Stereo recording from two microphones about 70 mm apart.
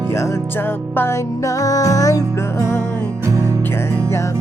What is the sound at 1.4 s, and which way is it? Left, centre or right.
Music, left.